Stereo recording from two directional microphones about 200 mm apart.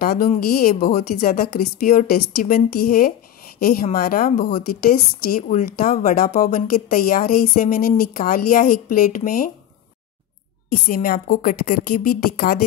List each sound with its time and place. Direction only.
0.0 s a woman's voice: 45° left (ahead or behind)
10.9 s a woman's voice: 45° left (ahead or behind)